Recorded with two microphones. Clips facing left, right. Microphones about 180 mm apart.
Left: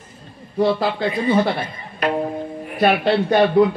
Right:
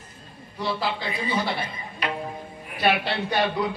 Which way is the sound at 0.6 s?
50° left (ahead or behind).